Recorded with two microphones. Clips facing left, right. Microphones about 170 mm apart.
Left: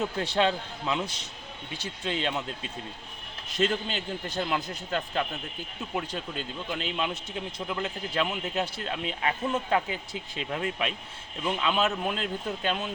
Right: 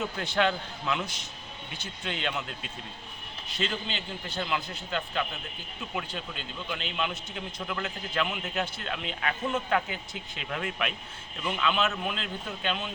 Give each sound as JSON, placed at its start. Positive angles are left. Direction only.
{"t": 0.2, "sound": "a man's voice", "side_deg": 30}
{"t": 2.0, "sound": "a man's voice", "side_deg": 35}
{"t": 3.5, "sound": "a man's voice", "side_deg": 45}